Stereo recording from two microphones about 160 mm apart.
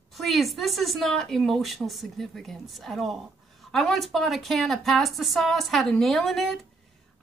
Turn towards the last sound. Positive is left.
turn(degrees=0)  # may be behind; listen again after turning